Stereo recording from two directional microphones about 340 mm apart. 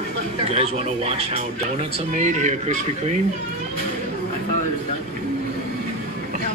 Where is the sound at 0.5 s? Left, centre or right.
Centre.